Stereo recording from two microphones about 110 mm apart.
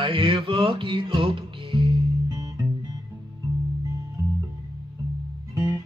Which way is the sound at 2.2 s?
30° right (ahead or behind).